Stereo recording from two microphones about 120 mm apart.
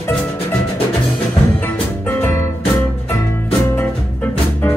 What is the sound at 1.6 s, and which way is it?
Music, 20° left (ahead or behind).